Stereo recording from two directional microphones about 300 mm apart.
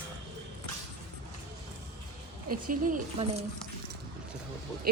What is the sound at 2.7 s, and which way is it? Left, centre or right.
Speech, right.